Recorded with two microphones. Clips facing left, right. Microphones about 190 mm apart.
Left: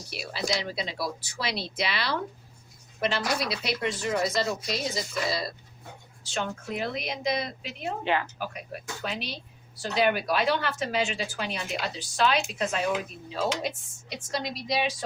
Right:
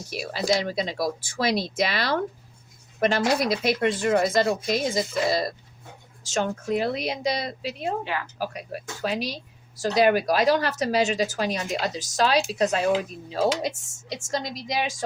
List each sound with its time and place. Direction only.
0.1 s speech: 45° right (ahead or behind)
6.3 s speech: 35° right (ahead or behind)
8.0 s a woman's voice: 25° left (ahead or behind)
8.4 s speech: 40° right (ahead or behind)